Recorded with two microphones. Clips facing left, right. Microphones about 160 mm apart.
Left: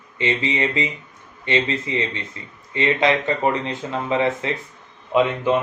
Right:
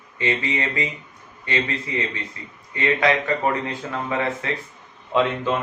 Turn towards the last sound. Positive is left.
turn(degrees=15)  # may be behind; listen again after turning